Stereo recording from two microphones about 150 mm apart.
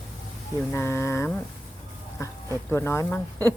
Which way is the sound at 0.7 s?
15° left (ahead or behind).